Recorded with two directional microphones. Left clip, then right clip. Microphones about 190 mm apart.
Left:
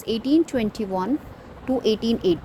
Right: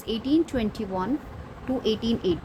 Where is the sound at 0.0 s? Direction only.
20° left (ahead or behind).